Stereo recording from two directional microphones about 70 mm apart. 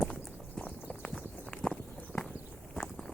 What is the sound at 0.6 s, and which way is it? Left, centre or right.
Clip-clop, centre.